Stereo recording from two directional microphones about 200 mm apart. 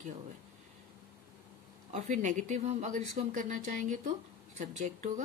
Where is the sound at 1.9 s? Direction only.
35° right (ahead or behind).